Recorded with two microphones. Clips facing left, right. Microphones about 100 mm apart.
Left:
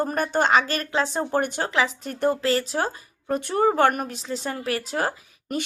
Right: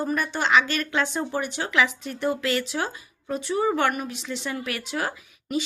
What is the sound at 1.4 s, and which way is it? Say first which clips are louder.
Speech: left 4 dB; 50° left (ahead or behind).